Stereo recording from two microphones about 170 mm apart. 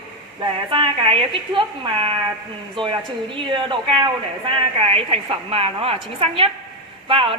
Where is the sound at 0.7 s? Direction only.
30° right (ahead or behind).